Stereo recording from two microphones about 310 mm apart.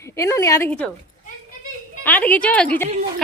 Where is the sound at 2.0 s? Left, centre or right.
Centre.